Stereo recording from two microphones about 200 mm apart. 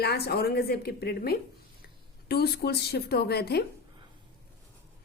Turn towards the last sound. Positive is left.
turn(degrees=50)  # may be behind; listen again after turning